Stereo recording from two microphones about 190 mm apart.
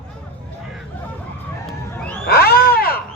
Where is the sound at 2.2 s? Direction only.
55° left (ahead or behind).